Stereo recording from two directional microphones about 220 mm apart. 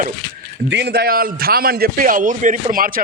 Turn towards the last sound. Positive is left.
turn(degrees=-40)  # may be behind; listen again after turning